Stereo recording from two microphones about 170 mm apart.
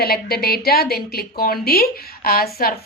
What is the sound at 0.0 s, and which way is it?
A woman's voice, 65° left (ahead or behind).